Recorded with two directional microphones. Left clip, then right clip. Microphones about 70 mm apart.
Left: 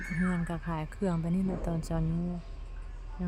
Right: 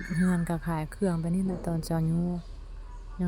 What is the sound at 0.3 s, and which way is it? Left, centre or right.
Speech, right.